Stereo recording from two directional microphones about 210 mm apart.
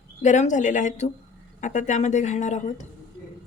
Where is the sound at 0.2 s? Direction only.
35° left (ahead or behind).